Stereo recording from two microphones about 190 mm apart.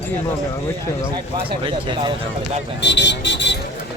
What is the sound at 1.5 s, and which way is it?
Speech, 25° right (ahead or behind).